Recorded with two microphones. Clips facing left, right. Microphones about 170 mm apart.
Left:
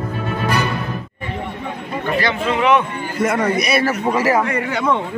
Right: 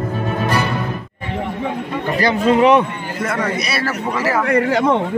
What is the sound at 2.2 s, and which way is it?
Speech, 40° right (ahead or behind).